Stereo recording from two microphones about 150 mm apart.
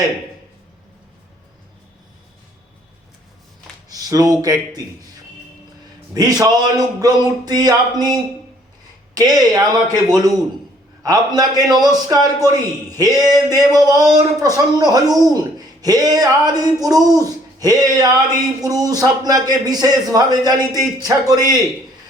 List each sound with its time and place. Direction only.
3.8 s speech: 25° right (ahead or behind)
6.1 s speech: 25° right (ahead or behind)